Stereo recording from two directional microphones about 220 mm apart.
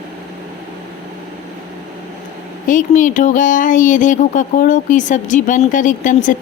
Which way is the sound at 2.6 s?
35° left (ahead or behind).